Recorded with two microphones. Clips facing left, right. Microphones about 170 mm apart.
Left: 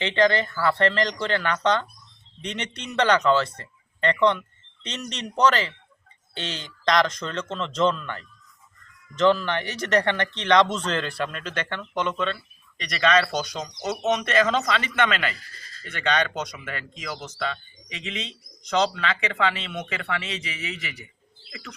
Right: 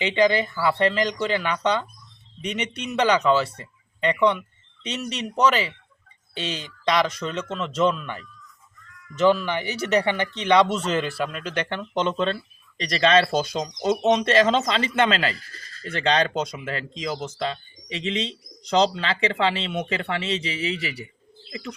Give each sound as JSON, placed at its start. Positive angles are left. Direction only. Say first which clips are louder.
{"t": 0.0, "sound": "speech", "louder": "right 1 dB", "side_deg": -10}